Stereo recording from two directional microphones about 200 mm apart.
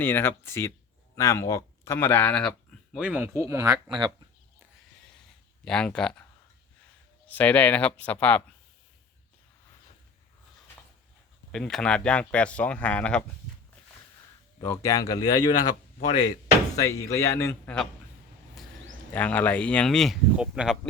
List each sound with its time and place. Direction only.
0.0 s speech: 10° left (ahead or behind); by 4.1 s 20° right (ahead or behind)
5.6 s speech: 5° left (ahead or behind)
7.3 s speech: 10° left (ahead or behind)
11.5 s speech: 5° left (ahead or behind)
14.6 s speech: 15° left (ahead or behind)
19.1 s speech: 10° left (ahead or behind)